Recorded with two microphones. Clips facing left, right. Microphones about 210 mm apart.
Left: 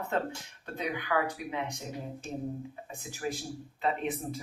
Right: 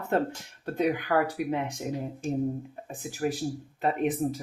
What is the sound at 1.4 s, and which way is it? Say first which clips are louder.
Speech: right 11 dB; 60° right (ahead or behind).